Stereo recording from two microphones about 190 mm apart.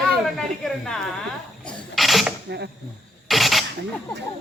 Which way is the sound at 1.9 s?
Centre (ahead or behind).